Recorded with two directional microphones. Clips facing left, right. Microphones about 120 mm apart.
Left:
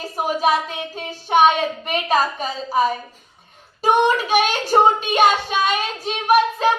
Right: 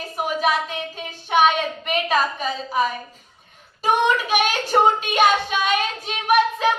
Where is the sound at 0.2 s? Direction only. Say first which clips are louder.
Left 3 dB; 40° left (ahead or behind).